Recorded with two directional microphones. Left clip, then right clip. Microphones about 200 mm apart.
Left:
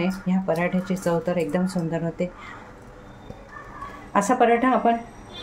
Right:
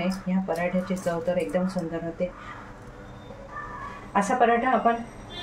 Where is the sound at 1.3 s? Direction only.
50° left (ahead or behind).